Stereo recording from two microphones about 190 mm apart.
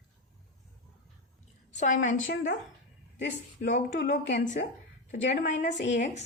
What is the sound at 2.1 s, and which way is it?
Speech, 80° left.